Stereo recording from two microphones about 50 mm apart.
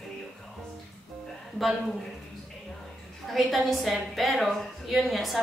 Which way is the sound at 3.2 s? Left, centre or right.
Centre.